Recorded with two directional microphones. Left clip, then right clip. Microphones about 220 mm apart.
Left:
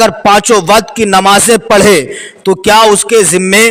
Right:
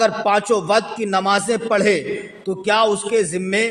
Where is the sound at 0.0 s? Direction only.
50° left (ahead or behind).